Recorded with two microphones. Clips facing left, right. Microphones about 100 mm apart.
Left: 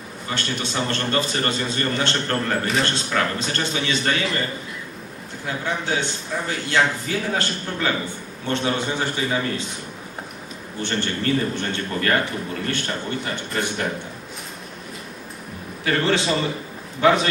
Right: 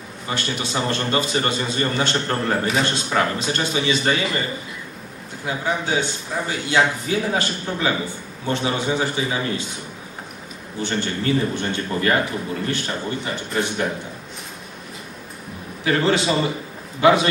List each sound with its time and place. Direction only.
0.3 s a man's voice: 5° right (ahead or behind)
5.5 s a man's voice: 5° right (ahead or behind)
10.8 s a man's voice: 5° right (ahead or behind)
15.8 s a man's voice: 5° right (ahead or behind)